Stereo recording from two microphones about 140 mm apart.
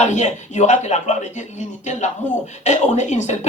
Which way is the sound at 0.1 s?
60° left (ahead or behind).